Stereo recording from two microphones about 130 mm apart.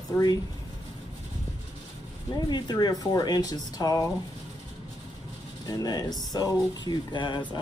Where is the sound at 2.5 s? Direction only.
35° left (ahead or behind).